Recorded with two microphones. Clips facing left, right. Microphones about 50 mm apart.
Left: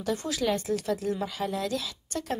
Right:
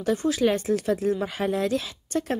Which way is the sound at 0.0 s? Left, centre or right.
Centre.